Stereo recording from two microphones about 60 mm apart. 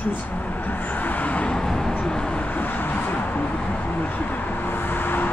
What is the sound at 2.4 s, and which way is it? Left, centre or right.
Vehicle, left.